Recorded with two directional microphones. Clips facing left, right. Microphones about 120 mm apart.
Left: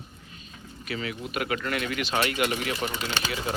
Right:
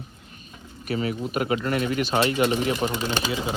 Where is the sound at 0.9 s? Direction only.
35° right (ahead or behind).